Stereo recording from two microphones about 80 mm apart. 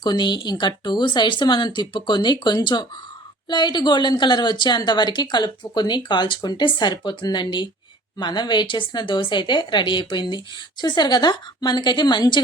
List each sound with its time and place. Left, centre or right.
0.0 s a woman's voice: left